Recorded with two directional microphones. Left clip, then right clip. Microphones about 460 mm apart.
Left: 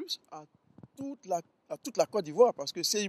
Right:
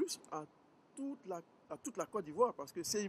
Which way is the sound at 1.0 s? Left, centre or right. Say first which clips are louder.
Left 10 dB; left.